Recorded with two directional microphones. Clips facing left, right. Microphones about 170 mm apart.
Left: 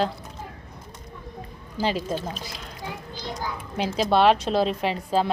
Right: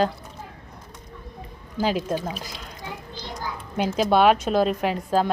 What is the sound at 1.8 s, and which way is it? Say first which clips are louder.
Speech: right 2 dB; 50° right (ahead or behind).